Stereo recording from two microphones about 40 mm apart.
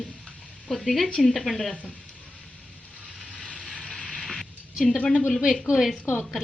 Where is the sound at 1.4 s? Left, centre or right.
Centre.